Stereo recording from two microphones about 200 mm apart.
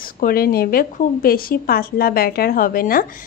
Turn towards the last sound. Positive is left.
turn(degrees=45)  # may be behind; listen again after turning